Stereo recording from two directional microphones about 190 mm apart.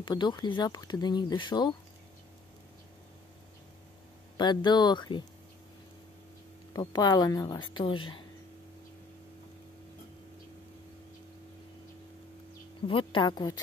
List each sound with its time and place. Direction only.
0.0 s speech: 25° left (ahead or behind)
4.4 s speech: 25° left (ahead or behind)
6.7 s speech: 20° left (ahead or behind)
12.8 s speech: 25° left (ahead or behind)